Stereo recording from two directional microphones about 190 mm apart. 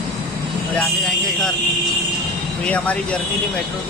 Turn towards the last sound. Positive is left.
turn(degrees=5)  # may be behind; listen again after turning